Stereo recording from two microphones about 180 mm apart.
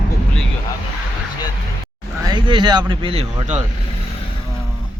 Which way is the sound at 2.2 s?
25° right (ahead or behind).